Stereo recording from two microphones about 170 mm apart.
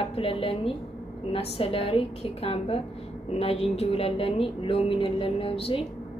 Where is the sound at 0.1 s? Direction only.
35° left (ahead or behind).